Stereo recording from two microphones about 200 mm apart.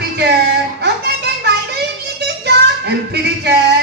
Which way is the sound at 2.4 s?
55° right (ahead or behind).